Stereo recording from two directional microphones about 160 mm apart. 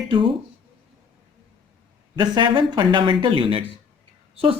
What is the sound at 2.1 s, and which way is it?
A woman's voice, 30° right (ahead or behind).